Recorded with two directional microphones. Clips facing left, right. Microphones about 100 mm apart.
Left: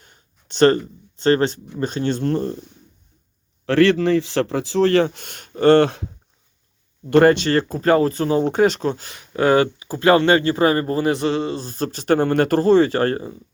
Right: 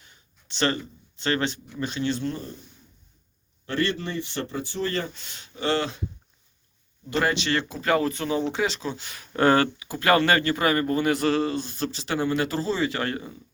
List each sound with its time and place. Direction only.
0.0 s a sound: 45° left (ahead or behind)
1.8 s speech: 40° left (ahead or behind); by 2.6 s 60° left (ahead or behind)
3.7 s a man's voice: 90° left; by 6.1 s 60° left (ahead or behind)
7.1 s speech: 50° left (ahead or behind)
9.2 s speech: 10° left (ahead or behind)
9.7 s a man's voice: 30° left (ahead or behind)
11.6 s speech: 40° left (ahead or behind)